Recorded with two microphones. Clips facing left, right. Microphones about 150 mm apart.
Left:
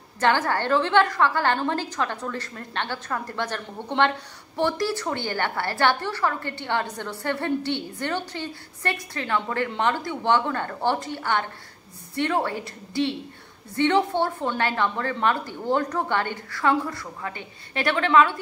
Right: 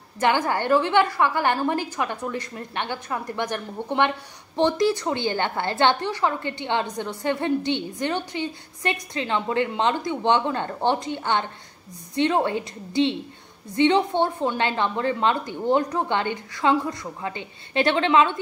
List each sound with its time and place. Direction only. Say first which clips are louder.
0.2 s a woman's voice: even; 15° right (ahead or behind)